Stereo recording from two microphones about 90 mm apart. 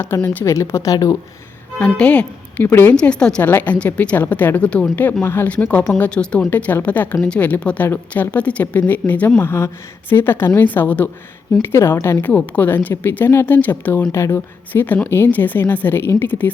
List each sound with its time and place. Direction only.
0.0 s speech: 25° left (ahead or behind)
1.8 s speech: 15° left (ahead or behind)
2.9 s speech: 10° left (ahead or behind); by 12.1 s 30° left (ahead or behind)
12.2 s speech: 15° left (ahead or behind)